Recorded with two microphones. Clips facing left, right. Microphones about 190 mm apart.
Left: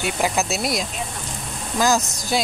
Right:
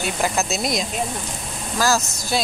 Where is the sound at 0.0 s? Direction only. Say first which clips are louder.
Left 1 dB; 15° left (ahead or behind).